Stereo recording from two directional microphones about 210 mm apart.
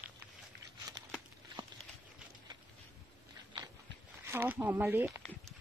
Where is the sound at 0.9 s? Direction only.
20° right (ahead or behind).